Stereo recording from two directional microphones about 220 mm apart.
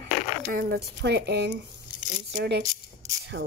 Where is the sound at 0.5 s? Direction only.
45° right (ahead or behind).